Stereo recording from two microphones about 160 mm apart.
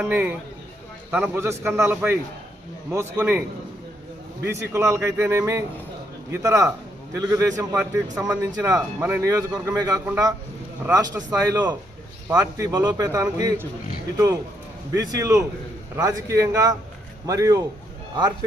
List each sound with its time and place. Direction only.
0.0 s speech: 10° right (ahead or behind)
4.4 s a man's voice: 15° right (ahead or behind)
10.9 s a man's voice: 20° right (ahead or behind)
14.9 s a man's voice: 20° right (ahead or behind)